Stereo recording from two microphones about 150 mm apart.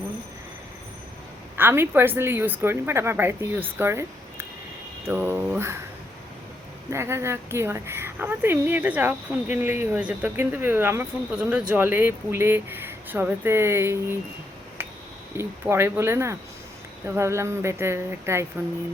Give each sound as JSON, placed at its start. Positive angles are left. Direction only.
{"t": 1.5, "sound": "speech", "side_deg": -15}
{"t": 6.9, "sound": "speech", "side_deg": -15}
{"t": 14.8, "sound": "a sound", "side_deg": -15}
{"t": 15.4, "sound": "speech", "side_deg": -15}